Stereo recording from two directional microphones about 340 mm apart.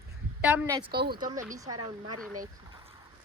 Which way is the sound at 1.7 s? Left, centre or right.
Right.